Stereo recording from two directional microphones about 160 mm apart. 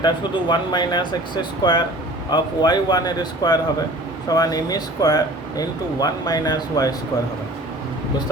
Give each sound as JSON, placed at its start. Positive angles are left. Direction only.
{"t": 0.0, "sound": "speech", "side_deg": 30}